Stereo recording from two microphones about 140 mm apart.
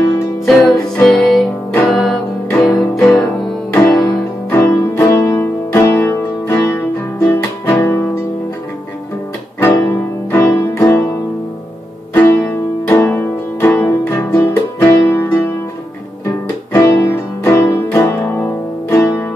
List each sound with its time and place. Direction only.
0.5 s music: 5° left (ahead or behind)
3.7 s music: 20° left (ahead or behind)
9.6 s music: 15° left (ahead or behind)
12.1 s music: 15° left (ahead or behind)